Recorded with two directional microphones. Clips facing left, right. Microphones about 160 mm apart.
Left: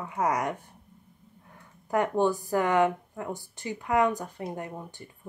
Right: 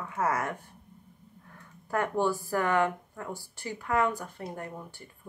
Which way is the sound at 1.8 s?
20° left (ahead or behind).